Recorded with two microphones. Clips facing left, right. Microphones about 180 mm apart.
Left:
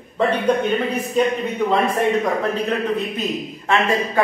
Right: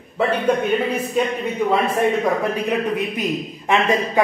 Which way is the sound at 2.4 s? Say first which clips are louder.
Even; 15° right (ahead or behind).